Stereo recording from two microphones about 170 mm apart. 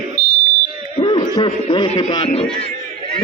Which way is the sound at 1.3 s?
25° left (ahead or behind).